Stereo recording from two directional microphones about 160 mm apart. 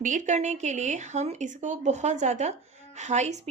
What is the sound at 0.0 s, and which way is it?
Speech, 50° right (ahead or behind).